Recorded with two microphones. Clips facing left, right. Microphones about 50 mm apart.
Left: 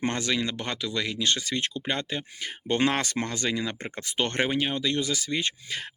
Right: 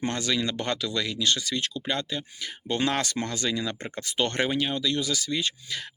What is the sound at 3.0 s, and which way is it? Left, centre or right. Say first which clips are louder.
Speech: even; centre.